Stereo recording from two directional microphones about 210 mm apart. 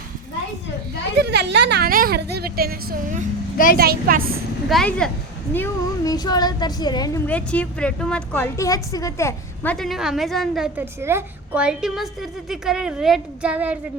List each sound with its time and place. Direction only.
1.2 s speech: 50° right (ahead or behind)
4.7 s a woman's voice: 5° left (ahead or behind)
5.5 s a woman's voice: 15° left (ahead or behind)
7.3 s a woman's voice: 5° left (ahead or behind)
9.7 s a woman's voice: centre (ahead or behind)